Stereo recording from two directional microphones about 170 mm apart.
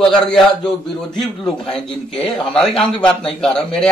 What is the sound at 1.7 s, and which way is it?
Speech, 5° left (ahead or behind).